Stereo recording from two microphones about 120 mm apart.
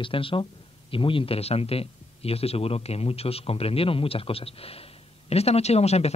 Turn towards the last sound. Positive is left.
turn(degrees=60)  # may be behind; listen again after turning